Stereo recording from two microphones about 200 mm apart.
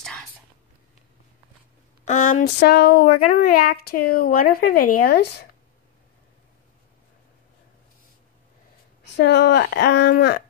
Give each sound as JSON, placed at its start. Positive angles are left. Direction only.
{"t": 2.0, "sound": "speech", "side_deg": 35}
{"t": 2.4, "sound": "speech", "side_deg": 55}
{"t": 9.0, "sound": "a woman's voice", "side_deg": 60}